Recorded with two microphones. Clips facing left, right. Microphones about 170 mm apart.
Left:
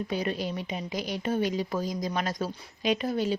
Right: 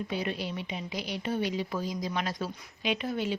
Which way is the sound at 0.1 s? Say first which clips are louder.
Left 3 dB; 40° left (ahead or behind).